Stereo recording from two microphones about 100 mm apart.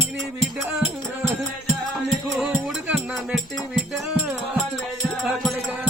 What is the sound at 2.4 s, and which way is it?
Music, 5° right (ahead or behind).